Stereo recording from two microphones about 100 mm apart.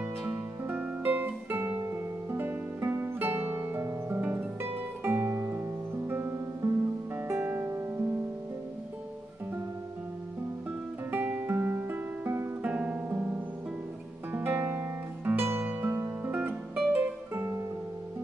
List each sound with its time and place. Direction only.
0.2 s music: 20° right (ahead or behind)
11.1 s music: 20° right (ahead or behind)